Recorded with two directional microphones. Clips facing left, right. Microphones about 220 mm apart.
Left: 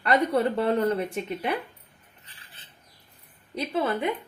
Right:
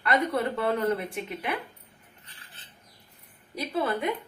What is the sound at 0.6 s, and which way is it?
A woman's voice, 35° left (ahead or behind).